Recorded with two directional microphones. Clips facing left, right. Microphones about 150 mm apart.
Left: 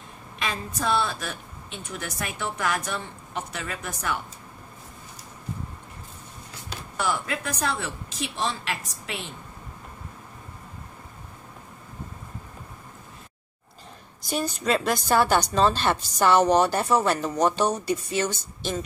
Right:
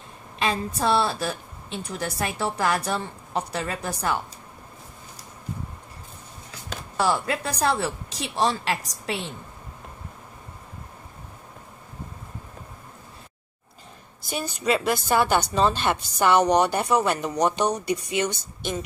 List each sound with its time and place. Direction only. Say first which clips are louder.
0.4 s a woman's voice: right 5 dB; 30° right (ahead or behind)
7.0 s a woman's voice: right 4 dB; 35° right (ahead or behind)
14.3 s a woman's voice: even; 10° right (ahead or behind)